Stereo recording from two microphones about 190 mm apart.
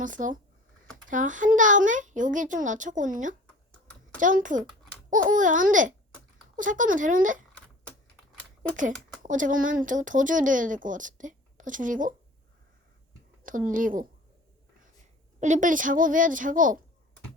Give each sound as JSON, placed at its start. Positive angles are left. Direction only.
{"t": 0.0, "sound": "a child's voice", "side_deg": -45}
{"t": 3.4, "sound": "typing", "side_deg": 5}
{"t": 4.2, "sound": "a child's voice", "side_deg": -45}
{"t": 9.2, "sound": "a child's voice", "side_deg": -45}
{"t": 13.4, "sound": "speech", "side_deg": -45}
{"t": 15.4, "sound": "a child's voice", "side_deg": -40}